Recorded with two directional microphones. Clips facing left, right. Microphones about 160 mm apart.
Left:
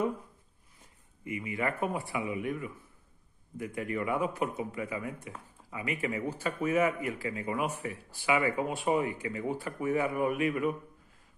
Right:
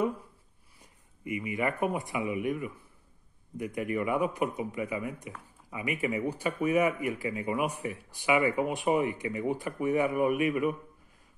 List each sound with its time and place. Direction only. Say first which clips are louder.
1.2 s speech: right 2 dB; 15° right (ahead or behind)